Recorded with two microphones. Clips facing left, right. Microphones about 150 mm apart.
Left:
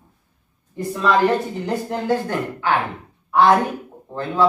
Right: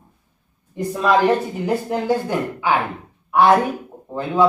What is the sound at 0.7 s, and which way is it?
Speech, 15° right (ahead or behind).